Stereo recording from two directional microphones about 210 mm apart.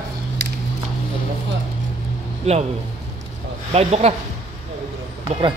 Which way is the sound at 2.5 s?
30° right (ahead or behind).